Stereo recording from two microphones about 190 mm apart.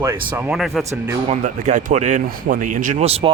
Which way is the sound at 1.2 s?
40° right (ahead or behind).